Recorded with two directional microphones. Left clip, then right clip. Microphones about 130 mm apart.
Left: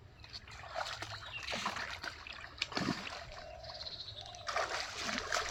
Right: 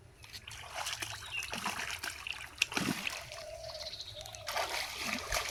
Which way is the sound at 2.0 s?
35° right (ahead or behind).